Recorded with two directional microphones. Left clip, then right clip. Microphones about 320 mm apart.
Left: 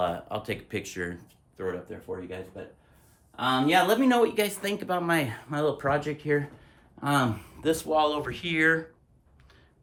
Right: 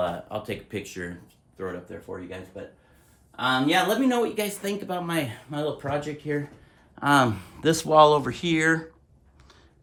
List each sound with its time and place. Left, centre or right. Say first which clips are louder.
0.0 s speech: right 1 dB; centre
7.0 s speech: right 6 dB; right